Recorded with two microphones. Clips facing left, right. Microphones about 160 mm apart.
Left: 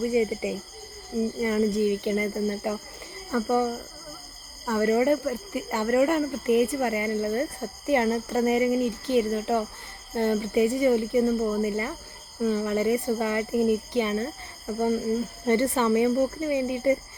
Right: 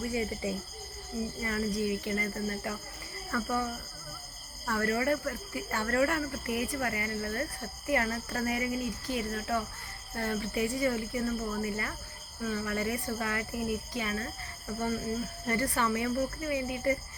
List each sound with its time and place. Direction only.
0.0 s speech: 20° left (ahead or behind)
15.4 s speech: 25° left (ahead or behind)